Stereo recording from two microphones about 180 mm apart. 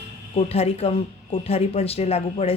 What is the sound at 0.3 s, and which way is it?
Speech, 35° left (ahead or behind).